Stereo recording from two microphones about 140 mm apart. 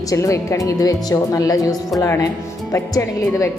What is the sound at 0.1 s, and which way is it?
Speech, 25° left (ahead or behind).